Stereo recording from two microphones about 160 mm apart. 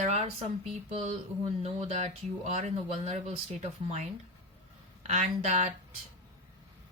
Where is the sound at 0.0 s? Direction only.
40° right (ahead or behind).